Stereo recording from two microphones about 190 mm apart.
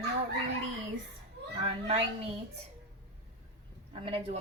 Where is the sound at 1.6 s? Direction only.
30° right (ahead or behind).